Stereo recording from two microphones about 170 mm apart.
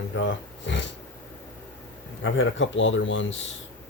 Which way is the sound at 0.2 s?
90° left.